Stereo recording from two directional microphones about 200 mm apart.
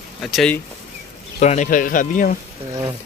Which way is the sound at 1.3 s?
35° left (ahead or behind).